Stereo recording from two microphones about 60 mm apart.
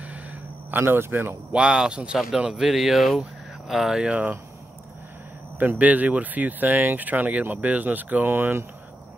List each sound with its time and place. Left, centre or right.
0.7 s speech: right
1.5 s speech: centre
5.8 s speech: right